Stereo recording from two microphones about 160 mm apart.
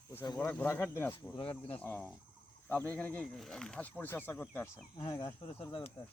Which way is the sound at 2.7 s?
10° left (ahead or behind).